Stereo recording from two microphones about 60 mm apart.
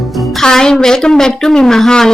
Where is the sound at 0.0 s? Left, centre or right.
Centre.